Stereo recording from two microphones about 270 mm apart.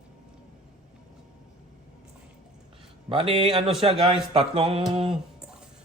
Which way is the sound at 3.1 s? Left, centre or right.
Centre.